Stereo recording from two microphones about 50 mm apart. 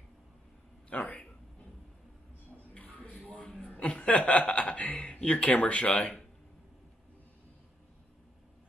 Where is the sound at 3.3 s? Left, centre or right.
Left.